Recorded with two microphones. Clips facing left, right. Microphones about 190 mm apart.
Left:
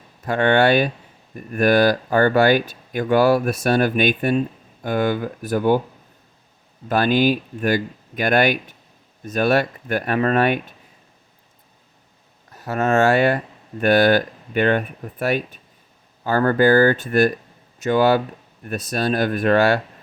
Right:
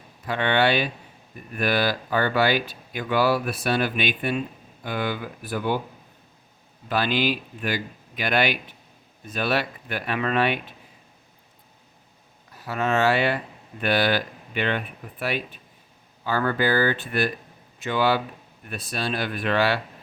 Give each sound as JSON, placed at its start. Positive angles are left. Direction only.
{"t": 0.3, "sound": "speech", "side_deg": 45}
{"t": 6.8, "sound": "speech", "side_deg": 45}
{"t": 12.5, "sound": "speech", "side_deg": 45}